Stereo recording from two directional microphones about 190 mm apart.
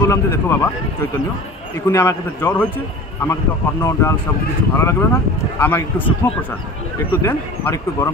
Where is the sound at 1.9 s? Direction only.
10° left (ahead or behind).